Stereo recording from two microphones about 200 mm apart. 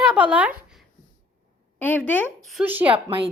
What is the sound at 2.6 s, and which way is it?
Speech, 10° right (ahead or behind).